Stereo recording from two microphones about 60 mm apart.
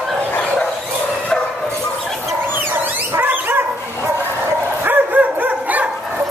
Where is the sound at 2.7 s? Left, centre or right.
Right.